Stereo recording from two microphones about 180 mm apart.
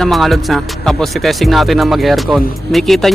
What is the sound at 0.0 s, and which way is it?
Speech, centre (ahead or behind).